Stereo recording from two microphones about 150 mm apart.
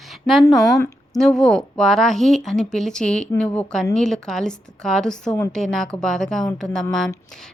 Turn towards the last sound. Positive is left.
turn(degrees=5)  # may be behind; listen again after turning